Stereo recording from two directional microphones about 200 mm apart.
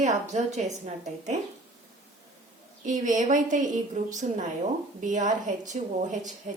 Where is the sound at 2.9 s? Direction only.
40° right (ahead or behind).